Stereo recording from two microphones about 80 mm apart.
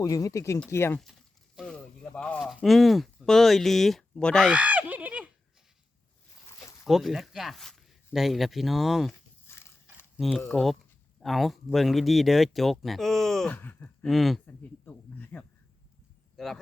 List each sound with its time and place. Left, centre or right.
0.0 s speech: left
1.6 s a sound: centre
2.6 s speech: centre
4.4 s a sound: centre
6.4 s a sound: left
6.8 s speech: centre
9.5 s horse: left
10.2 s speech: centre
13.5 s speech: left
14.1 s speech: centre
14.4 s speech: left
16.4 s speech: centre